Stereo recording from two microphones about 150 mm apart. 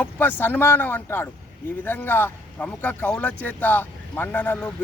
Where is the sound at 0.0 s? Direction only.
15° left (ahead or behind).